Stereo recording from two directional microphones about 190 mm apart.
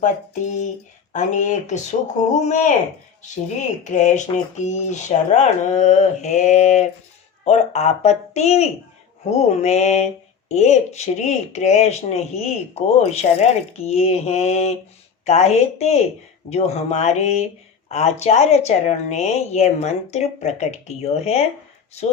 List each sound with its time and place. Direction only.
0.0 s a woman's voice: 40° left (ahead or behind)